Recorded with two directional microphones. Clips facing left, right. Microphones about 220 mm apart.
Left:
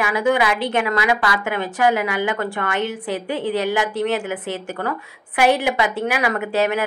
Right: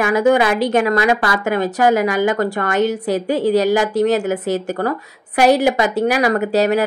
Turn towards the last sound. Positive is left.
turn(degrees=-40)  # may be behind; listen again after turning